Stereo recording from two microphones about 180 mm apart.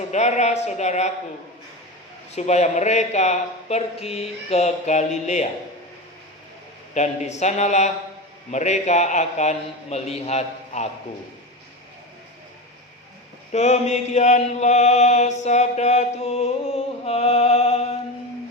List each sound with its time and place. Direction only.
0.1 s a man's voice: 40° left (ahead or behind)
2.3 s a man's voice: 40° left (ahead or behind)
6.9 s a man's voice: 40° left (ahead or behind)
13.5 s chant: 40° left (ahead or behind)